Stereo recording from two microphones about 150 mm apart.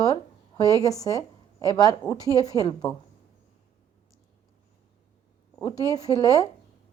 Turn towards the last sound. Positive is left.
turn(degrees=25)  # may be behind; listen again after turning